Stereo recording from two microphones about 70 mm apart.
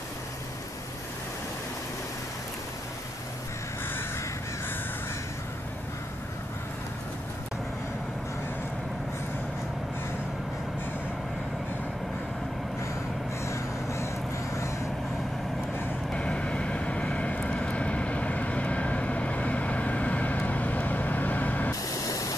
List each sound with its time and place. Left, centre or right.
13.5 s vehicle: left
16.1 s vehicle: centre
21.8 s vehicle: left